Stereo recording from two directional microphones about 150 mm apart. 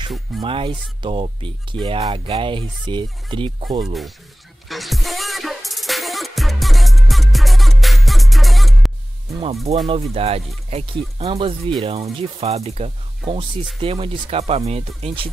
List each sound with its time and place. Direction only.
0.4 s speech: 35° right (ahead or behind)
3.8 s speech: centre (ahead or behind)
4.6 s music: centre (ahead or behind)
9.7 s speech: 40° right (ahead or behind)